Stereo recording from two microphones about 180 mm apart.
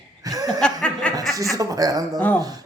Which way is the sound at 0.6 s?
5° left (ahead or behind).